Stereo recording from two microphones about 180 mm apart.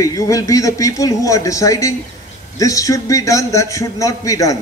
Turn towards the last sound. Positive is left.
turn(degrees=20)  # may be behind; listen again after turning